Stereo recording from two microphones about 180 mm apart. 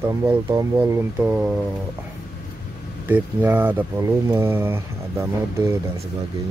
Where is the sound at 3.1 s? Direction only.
10° right (ahead or behind).